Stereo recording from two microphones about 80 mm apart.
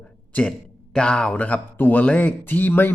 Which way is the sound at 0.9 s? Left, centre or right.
Centre.